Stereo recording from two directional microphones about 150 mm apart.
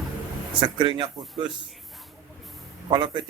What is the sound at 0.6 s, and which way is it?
Speech, 30° right (ahead or behind).